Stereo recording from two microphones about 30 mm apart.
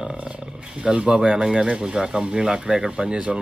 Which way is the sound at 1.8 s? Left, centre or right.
Right.